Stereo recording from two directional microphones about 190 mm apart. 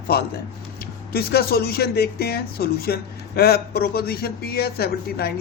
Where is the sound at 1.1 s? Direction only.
55° left (ahead or behind).